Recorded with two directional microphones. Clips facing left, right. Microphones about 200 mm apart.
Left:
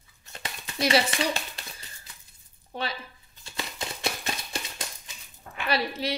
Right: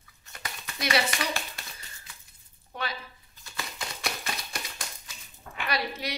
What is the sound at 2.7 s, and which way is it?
Speech, 30° left (ahead or behind).